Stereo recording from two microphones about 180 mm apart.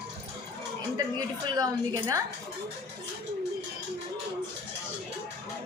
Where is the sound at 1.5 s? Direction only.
20° right (ahead or behind).